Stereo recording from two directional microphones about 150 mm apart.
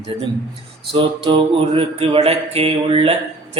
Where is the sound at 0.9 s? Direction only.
35° right (ahead or behind).